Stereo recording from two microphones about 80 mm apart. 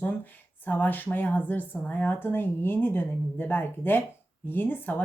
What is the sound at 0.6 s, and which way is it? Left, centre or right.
A woman's voice, left.